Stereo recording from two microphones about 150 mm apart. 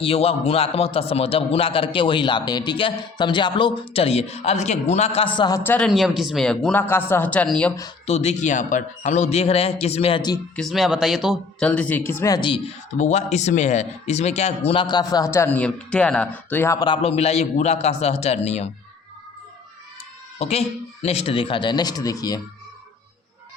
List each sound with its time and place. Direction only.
0.0 s a man's voice: 40° left (ahead or behind)
5.4 s speech: 25° left (ahead or behind)
5.6 s a woman's voice: 10° left (ahead or behind)
5.9 s speech: centre (ahead or behind)
8.0 s a man's voice: 45° left (ahead or behind)
10.5 s speech: centre (ahead or behind)
11.6 s a woman's voice: 10° left (ahead or behind)
12.3 s a man's voice: 35° left (ahead or behind)
13.0 s speech: 50° left (ahead or behind); by 16.8 s 15° left (ahead or behind)
16.8 s a man's voice: 35° left (ahead or behind)
20.4 s a man's voice: 45° left (ahead or behind); by 22.4 s 25° left (ahead or behind)